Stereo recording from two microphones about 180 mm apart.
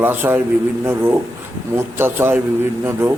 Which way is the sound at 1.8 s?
15° right (ahead or behind).